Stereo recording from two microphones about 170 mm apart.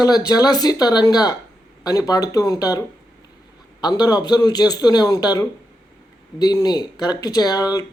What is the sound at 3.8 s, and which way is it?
Speech, 25° left (ahead or behind).